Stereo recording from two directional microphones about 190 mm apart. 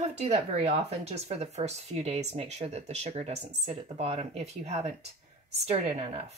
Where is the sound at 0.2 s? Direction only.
30° right (ahead or behind).